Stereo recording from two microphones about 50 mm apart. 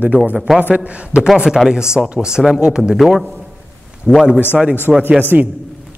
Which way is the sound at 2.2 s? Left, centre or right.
Centre.